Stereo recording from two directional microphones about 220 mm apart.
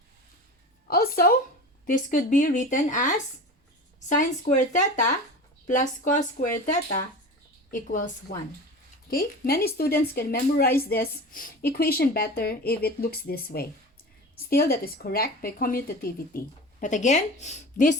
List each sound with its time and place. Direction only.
0.9 s a woman's voice: 45° left (ahead or behind)
4.2 s speech: 35° left (ahead or behind)